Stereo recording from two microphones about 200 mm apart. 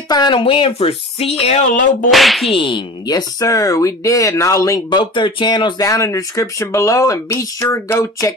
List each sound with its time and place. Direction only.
0.1 s speech: 25° left (ahead or behind)
2.0 s whip: centre (ahead or behind)
2.5 s speech: 25° left (ahead or behind)